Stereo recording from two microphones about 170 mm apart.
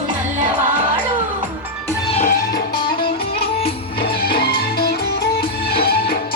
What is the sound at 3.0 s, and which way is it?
Music, 35° left (ahead or behind).